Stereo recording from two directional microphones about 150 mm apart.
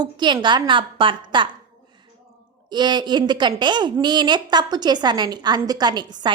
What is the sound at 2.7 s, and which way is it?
A woman's voice, 30° right (ahead or behind).